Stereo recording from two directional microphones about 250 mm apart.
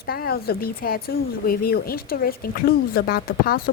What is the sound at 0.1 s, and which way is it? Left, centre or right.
Speech, left.